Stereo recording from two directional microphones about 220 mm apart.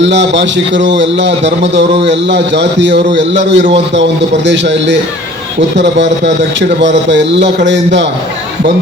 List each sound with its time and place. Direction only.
0.0 s a man's voice: 55° right (ahead or behind)